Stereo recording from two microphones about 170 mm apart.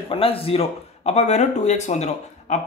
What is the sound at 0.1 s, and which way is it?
Speech, 35° left (ahead or behind).